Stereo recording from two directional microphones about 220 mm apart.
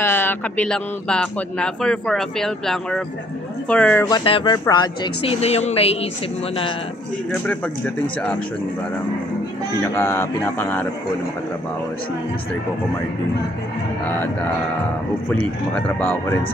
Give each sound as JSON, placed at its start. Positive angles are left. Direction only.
{"t": 0.0, "sound": "speech", "side_deg": 10}
{"t": 4.1, "sound": "speech", "side_deg": 25}
{"t": 9.9, "sound": "speech", "side_deg": 10}
{"t": 15.2, "sound": "speech", "side_deg": 5}